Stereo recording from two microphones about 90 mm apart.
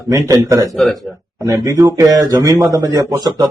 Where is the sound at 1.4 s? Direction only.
35° right (ahead or behind).